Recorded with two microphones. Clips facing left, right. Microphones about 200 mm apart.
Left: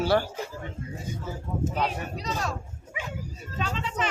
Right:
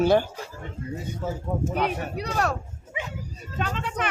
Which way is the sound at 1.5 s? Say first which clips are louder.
Right 2 dB; 55° right (ahead or behind).